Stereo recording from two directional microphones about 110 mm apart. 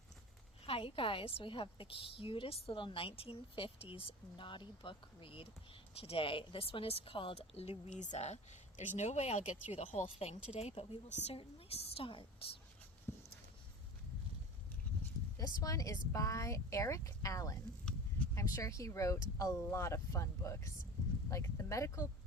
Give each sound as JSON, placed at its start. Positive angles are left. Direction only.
{"t": 0.6, "sound": "a woman's voice", "side_deg": 60}
{"t": 9.5, "sound": "speech", "side_deg": 75}
{"t": 11.3, "sound": "a woman's voice", "side_deg": 60}
{"t": 13.1, "sound": "a sound", "side_deg": 20}
{"t": 15.6, "sound": "speech", "side_deg": 30}